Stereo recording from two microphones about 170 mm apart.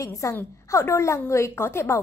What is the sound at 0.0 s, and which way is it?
A woman's voice, 20° left (ahead or behind).